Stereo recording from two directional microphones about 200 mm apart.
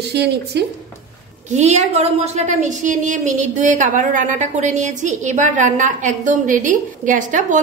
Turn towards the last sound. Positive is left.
turn(degrees=-40)  # may be behind; listen again after turning